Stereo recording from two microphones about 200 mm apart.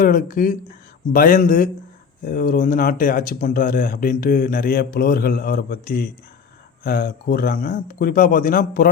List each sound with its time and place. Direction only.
0.0 s speech: 45° left (ahead or behind)